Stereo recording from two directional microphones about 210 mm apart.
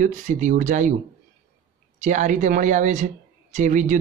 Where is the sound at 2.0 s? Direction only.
35° right (ahead or behind).